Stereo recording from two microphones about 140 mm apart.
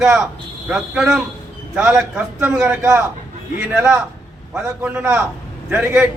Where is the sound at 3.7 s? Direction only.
5° right (ahead or behind).